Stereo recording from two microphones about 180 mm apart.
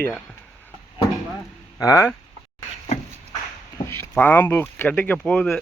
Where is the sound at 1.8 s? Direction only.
20° left (ahead or behind).